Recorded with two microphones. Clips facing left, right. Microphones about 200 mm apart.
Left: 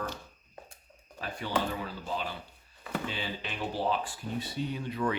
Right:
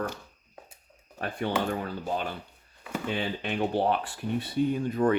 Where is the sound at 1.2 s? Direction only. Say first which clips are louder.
Right 4 dB; 55° right (ahead or behind).